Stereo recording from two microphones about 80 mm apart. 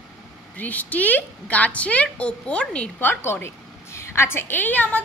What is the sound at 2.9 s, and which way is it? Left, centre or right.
A woman's voice, left.